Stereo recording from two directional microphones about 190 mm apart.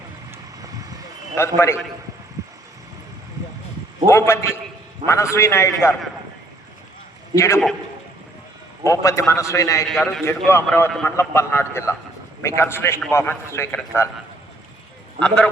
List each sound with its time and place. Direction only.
0.3 s vehicle: 20° right (ahead or behind)
1.4 s a man's voice: 15° left (ahead or behind)
4.0 s a man's voice: 15° left (ahead or behind)
7.3 s a man's voice: 15° left (ahead or behind)
8.8 s a man's voice: 15° left (ahead or behind)
10.0 s a man's voice: centre (ahead or behind)
10.2 s a man's voice: 15° left (ahead or behind)